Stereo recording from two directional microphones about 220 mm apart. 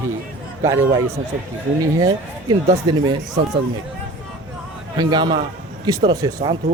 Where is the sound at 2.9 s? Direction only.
20° right (ahead or behind).